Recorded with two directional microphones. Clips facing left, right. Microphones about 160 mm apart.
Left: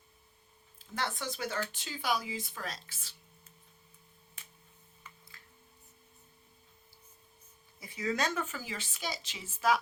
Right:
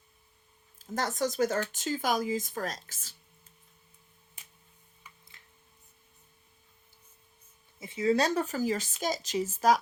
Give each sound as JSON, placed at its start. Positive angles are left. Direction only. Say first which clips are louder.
{"t": 0.8, "sound": "a woman's voice", "louder": "right 7 dB", "side_deg": -40}
{"t": 5.3, "sound": "a sound", "louder": "left 2 dB", "side_deg": -20}
{"t": 7.8, "sound": "speech", "louder": "right 7 dB", "side_deg": -25}